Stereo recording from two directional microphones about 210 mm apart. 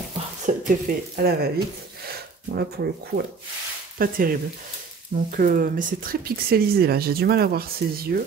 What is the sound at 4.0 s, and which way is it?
Speech, 45° right (ahead or behind).